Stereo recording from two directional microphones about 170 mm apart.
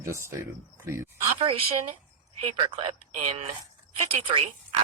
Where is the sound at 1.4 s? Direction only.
30° right (ahead or behind).